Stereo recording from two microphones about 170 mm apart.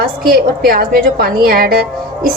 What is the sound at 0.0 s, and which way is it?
A woman's voice, 60° right (ahead or behind).